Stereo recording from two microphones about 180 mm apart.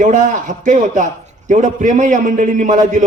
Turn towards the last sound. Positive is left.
turn(degrees=-45)  # may be behind; listen again after turning